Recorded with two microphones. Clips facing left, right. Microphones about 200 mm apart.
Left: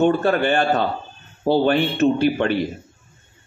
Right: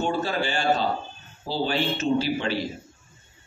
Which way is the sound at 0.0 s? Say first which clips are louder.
Left 8 dB; 60° left (ahead or behind).